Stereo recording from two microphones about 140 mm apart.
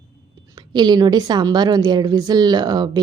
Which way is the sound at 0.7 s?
30° right (ahead or behind).